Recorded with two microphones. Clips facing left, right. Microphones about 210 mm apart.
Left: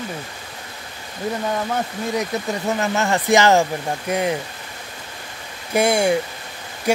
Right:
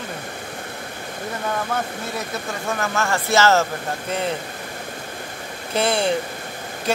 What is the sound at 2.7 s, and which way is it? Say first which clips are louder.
Speech: left 2 dB; 20° left (ahead or behind).